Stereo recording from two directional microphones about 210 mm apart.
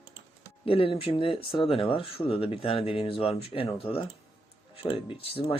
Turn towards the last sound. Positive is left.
turn(degrees=25)  # may be behind; listen again after turning